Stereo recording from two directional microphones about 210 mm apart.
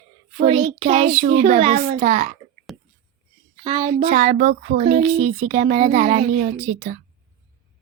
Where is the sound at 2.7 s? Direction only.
Centre (ahead or behind).